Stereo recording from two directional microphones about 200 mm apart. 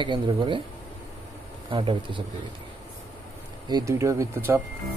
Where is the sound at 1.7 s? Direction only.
25° right (ahead or behind).